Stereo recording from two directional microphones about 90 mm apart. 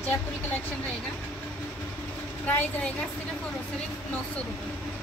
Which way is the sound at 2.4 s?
20° left (ahead or behind).